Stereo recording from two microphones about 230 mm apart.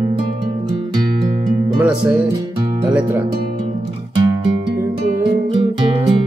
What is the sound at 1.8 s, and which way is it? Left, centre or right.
Music, centre.